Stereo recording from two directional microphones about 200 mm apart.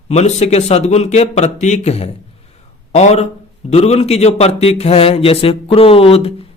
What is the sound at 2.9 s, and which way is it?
Speech, 35° left (ahead or behind).